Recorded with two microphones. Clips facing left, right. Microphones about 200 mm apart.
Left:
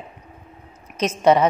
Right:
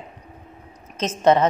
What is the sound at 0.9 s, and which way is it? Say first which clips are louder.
Speech: left 1 dB; 10° left (ahead or behind).